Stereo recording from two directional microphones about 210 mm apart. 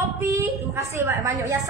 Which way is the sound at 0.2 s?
15° right (ahead or behind).